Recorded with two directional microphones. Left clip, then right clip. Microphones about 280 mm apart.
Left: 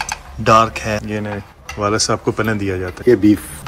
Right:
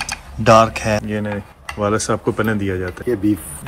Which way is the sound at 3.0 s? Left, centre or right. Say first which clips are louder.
Left 8 dB; left.